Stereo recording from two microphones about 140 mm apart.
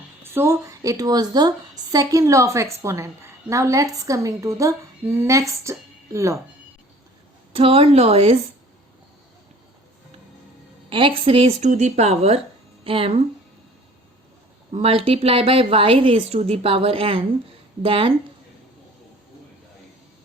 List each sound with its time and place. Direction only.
0.2 s a woman's voice: 20° right (ahead or behind)
7.5 s a woman's voice: 40° right (ahead or behind)
10.8 s a woman's voice: 40° right (ahead or behind)
14.7 s a woman's voice: 45° right (ahead or behind)